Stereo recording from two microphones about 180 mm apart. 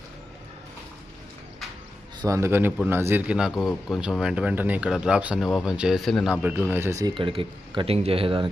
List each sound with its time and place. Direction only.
2.2 s a man's voice: 15° right (ahead or behind)
7.1 s speech: 30° right (ahead or behind)